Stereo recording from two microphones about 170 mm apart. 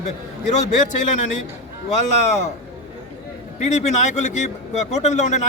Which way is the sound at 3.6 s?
40° left (ahead or behind).